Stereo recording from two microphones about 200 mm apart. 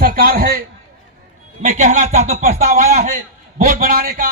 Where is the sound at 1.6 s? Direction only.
35° right (ahead or behind).